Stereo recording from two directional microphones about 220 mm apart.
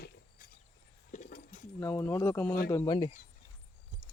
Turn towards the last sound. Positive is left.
turn(degrees=15)  # may be behind; listen again after turning